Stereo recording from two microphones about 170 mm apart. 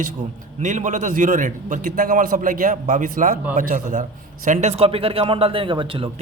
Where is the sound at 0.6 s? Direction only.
45° right (ahead or behind).